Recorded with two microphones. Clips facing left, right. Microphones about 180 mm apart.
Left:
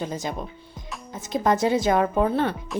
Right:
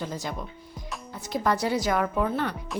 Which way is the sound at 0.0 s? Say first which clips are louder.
Left 4 dB; 20° left (ahead or behind).